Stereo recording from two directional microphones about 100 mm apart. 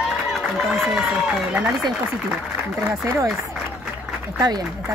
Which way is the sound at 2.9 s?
30° right (ahead or behind).